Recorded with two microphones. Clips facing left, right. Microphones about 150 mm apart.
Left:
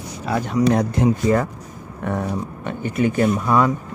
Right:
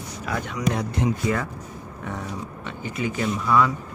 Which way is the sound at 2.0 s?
60° left (ahead or behind).